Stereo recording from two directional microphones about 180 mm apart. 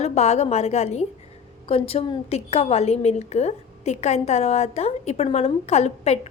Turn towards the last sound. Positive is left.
turn(degrees=35)  # may be behind; listen again after turning